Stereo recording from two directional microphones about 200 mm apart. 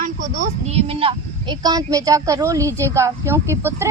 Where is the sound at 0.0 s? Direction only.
40° right (ahead or behind).